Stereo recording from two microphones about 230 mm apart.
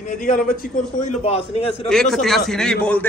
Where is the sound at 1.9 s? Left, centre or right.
Centre.